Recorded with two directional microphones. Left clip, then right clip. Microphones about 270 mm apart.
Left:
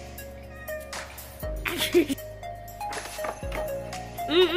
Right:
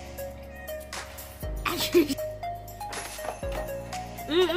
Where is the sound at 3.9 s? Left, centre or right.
Centre.